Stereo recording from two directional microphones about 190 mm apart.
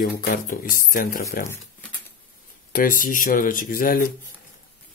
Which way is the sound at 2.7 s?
45° left (ahead or behind).